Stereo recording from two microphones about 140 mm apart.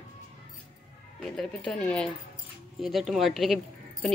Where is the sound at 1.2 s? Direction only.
5° left (ahead or behind).